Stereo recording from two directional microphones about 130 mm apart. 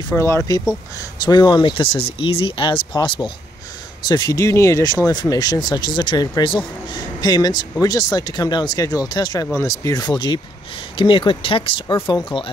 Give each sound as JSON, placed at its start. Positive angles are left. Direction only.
{"t": 0.1, "sound": "speech", "side_deg": 20}